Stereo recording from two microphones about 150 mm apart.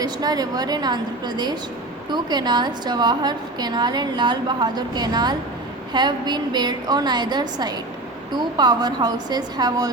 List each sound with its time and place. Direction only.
0.0 s a woman's voice: 25° right (ahead or behind)